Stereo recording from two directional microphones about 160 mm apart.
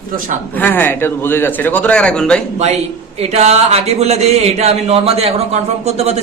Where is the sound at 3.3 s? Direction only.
40° right (ahead or behind).